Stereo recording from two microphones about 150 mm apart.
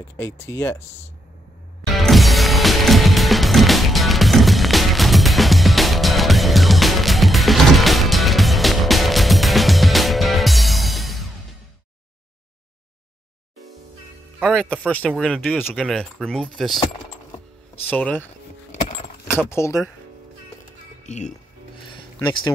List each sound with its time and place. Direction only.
0.2 s speech: 15° left (ahead or behind)
2.0 s music: centre (ahead or behind)
14.4 s speech: 5° left (ahead or behind)
17.8 s speech: 10° left (ahead or behind)
18.7 s keys jangling: 45° left (ahead or behind)
19.2 s speech: 15° left (ahead or behind)
21.0 s music: 55° left (ahead or behind)
21.8 s a sound: 35° left (ahead or behind)